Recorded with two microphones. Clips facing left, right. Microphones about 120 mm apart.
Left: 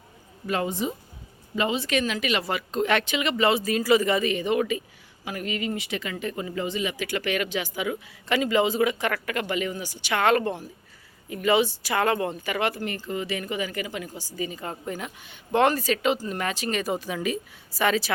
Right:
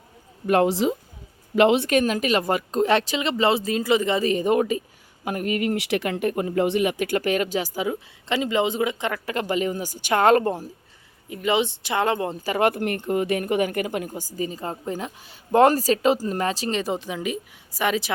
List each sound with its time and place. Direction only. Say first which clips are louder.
0.4 s speech: right 8 dB; 60° right (ahead or behind); by 0.9 s 90° right
1.5 s speech: right 9 dB; 70° right (ahead or behind)
1.9 s speech: right 5 dB; 45° right (ahead or behind); by 4.2 s 25° right (ahead or behind)
4.2 s speech: right 4 dB; 40° right (ahead or behind)
8.3 s speech: even; 20° right (ahead or behind)
9.3 s speech: right 4 dB; 35° right (ahead or behind)
11.3 s speech: left 1 dB; 20° right (ahead or behind)